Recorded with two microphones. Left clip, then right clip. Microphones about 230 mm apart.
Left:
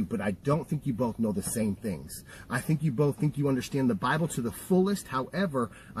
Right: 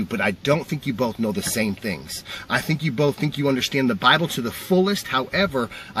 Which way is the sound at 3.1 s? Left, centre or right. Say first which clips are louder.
Right 7 dB; centre.